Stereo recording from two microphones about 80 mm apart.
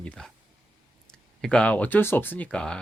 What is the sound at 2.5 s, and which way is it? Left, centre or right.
Speech, centre.